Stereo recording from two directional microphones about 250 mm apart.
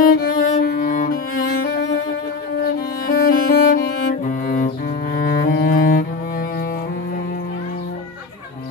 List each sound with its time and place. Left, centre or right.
0.0 s cello: left
2.6 s music: left